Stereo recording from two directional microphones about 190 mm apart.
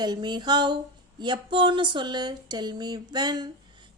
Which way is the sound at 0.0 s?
20° right (ahead or behind).